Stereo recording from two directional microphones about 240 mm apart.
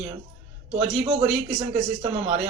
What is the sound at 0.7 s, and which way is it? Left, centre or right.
Speech, right.